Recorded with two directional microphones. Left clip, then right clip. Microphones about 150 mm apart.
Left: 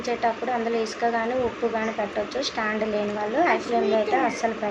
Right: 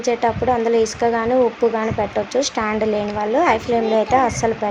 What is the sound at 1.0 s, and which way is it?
Speech, 50° right (ahead or behind).